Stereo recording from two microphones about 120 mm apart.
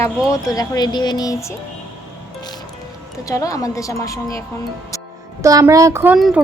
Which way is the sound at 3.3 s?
30° left (ahead or behind).